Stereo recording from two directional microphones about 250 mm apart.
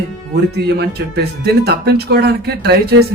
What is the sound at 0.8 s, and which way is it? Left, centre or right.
Speech, right.